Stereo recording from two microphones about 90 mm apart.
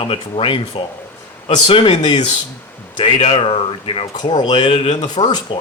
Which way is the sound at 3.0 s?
90° left.